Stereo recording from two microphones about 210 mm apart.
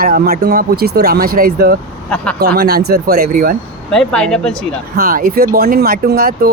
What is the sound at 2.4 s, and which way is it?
Speech, 50° right (ahead or behind).